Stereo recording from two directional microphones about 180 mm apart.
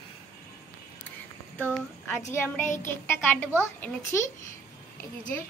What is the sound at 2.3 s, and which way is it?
Speech, 15° left (ahead or behind).